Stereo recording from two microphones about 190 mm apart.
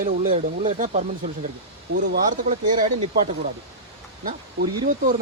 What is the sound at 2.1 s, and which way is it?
Speech, 45° right (ahead or behind).